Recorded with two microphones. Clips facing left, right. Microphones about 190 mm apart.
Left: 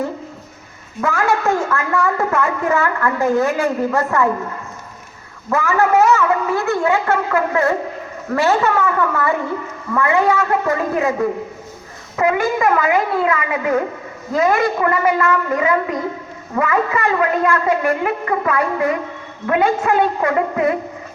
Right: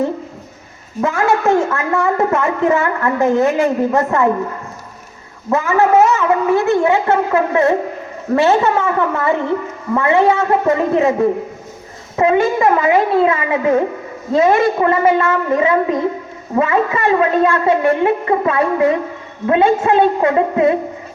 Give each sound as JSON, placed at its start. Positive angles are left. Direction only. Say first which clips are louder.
{"t": 1.0, "sound": "a woman's voice", "louder": "right 3 dB", "side_deg": -20}
{"t": 5.5, "sound": "a woman's voice", "louder": "right 3 dB", "side_deg": -25}